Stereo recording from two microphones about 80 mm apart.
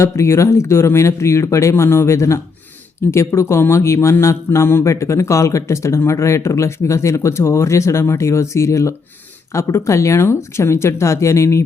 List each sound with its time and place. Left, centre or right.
0.0 s speech: left